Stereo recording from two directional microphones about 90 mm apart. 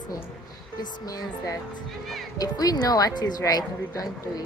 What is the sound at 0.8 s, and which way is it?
Speech, 45° left (ahead or behind).